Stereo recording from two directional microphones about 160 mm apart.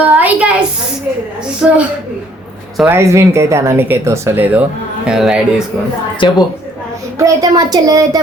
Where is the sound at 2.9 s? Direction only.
15° right (ahead or behind).